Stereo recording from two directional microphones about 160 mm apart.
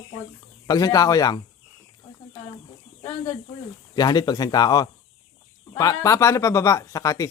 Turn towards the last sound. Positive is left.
turn(degrees=20)  # may be behind; listen again after turning